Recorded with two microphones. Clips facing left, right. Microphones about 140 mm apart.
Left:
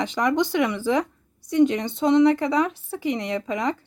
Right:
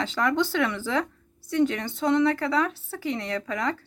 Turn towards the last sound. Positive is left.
turn(degrees=20)  # may be behind; listen again after turning